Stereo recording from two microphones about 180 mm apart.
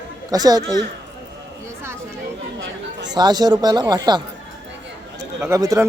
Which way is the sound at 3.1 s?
25° right (ahead or behind).